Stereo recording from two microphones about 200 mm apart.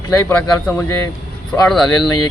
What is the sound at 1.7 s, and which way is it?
Speech, centre (ahead or behind).